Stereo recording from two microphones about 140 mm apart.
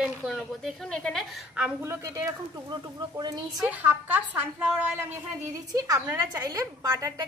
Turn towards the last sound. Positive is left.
turn(degrees=-25)  # may be behind; listen again after turning